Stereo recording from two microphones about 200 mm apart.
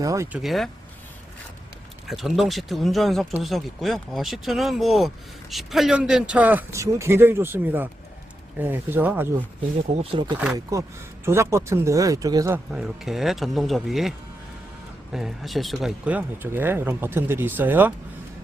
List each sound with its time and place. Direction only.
0.0 s speech: 15° right (ahead or behind)
0.3 s speech: centre (ahead or behind)
2.0 s speech: centre (ahead or behind)
10.0 s speech: 25° right (ahead or behind)
10.3 s speech: 10° right (ahead or behind)
12.7 s speech: 5° right (ahead or behind)
15.1 s speech: centre (ahead or behind)